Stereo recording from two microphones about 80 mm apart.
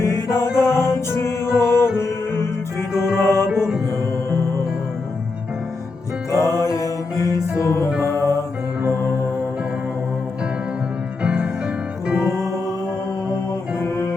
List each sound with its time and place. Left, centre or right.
0.2 s music: left
3.5 s music: centre
6.3 s music: left
8.0 s music: left
11.2 s music: centre
13.7 s music: left